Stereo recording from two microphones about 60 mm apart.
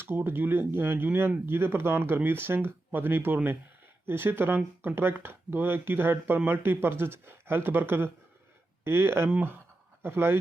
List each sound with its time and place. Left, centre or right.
0.0 s speech: right